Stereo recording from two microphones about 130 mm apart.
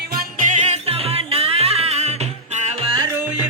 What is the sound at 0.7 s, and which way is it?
Music, 50° right (ahead or behind).